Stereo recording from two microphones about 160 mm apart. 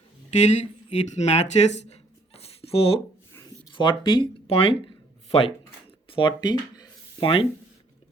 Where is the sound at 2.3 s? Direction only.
40° left (ahead or behind).